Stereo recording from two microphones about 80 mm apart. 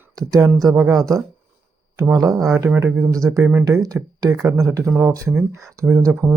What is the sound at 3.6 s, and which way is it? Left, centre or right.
Speech, right.